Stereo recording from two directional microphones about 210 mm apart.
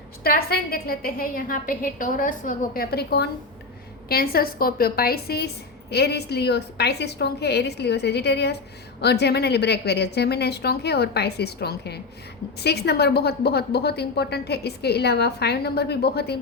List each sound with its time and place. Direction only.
0.2 s a woman's voice: 45° left (ahead or behind)